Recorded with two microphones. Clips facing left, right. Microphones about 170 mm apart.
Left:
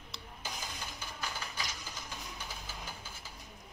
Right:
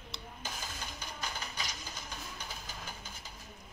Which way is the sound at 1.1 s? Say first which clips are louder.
Even; 20° right (ahead or behind).